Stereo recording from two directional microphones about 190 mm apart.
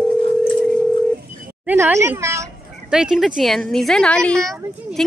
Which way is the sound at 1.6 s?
10° right (ahead or behind).